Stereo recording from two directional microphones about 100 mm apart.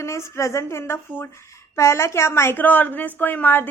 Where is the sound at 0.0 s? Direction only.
30° left (ahead or behind).